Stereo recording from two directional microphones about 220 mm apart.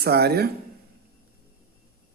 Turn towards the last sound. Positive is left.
turn(degrees=-45)  # may be behind; listen again after turning